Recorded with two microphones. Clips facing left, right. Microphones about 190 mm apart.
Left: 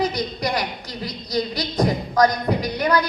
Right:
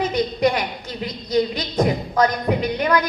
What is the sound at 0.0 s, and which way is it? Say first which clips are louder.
A woman's voice: right 4 dB; 35° left (ahead or behind).